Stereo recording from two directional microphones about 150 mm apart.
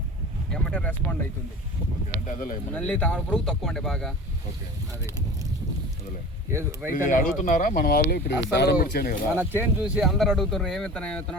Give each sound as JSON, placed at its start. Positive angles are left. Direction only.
{"t": 0.5, "sound": "a sound", "side_deg": 5}
{"t": 2.2, "sound": "speech", "side_deg": 60}
{"t": 2.7, "sound": "speech", "side_deg": 5}
{"t": 6.5, "sound": "speech", "side_deg": -20}
{"t": 6.9, "sound": "speech", "side_deg": 60}
{"t": 9.3, "sound": "speech", "side_deg": -15}